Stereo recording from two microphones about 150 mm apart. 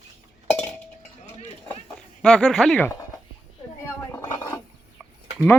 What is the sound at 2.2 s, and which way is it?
Speech, 5° left (ahead or behind).